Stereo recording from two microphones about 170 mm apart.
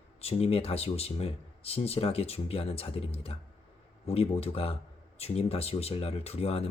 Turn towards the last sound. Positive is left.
turn(degrees=35)  # may be behind; listen again after turning